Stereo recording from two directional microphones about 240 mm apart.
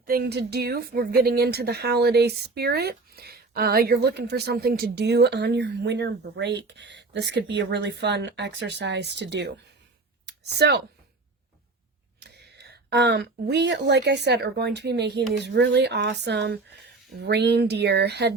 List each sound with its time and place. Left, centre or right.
0.0 s speech: right
10.2 s a sound: right
12.2 s speech: right